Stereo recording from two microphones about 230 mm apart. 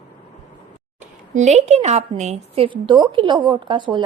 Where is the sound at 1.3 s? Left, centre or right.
Right.